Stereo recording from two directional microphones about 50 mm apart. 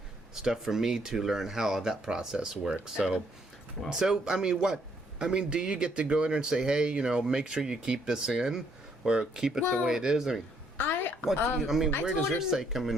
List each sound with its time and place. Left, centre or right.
0.4 s speech: centre
10.8 s a sound: left
11.3 s speech: left
11.6 s speech: centre